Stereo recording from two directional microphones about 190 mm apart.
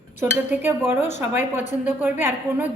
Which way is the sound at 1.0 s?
35° left (ahead or behind).